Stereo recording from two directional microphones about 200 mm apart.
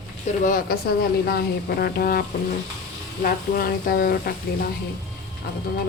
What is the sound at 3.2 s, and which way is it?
Speech, 50° left (ahead or behind).